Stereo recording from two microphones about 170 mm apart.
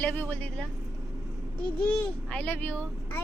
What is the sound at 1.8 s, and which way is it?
A woman's voice, 10° left (ahead or behind).